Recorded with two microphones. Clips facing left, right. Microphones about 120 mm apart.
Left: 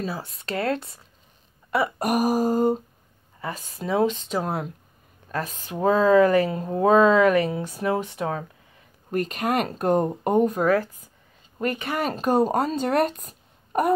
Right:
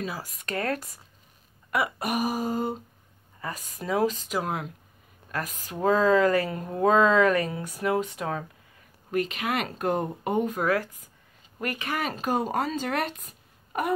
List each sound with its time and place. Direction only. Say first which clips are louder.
0.0 s speech: left 3 dB; 30° left (ahead or behind)
1.7 s speech: left 4 dB; 40° left (ahead or behind)
3.3 s speech: left 3 dB; 30° left (ahead or behind)
4.5 s speech: left 3 dB; 40° left (ahead or behind)
9.1 s speech: left 3 dB; 40° left (ahead or behind)
12.0 s speech: left 7 dB; 40° left (ahead or behind)